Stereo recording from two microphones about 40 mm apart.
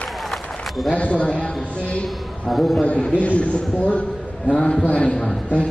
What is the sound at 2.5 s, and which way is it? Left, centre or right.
Speech, centre.